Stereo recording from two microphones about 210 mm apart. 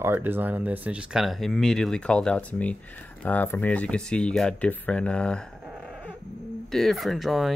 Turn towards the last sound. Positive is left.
turn(degrees=0)  # may be behind; listen again after turning